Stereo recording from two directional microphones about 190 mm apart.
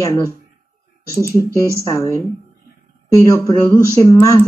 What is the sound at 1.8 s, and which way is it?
Speech, 15° left (ahead or behind).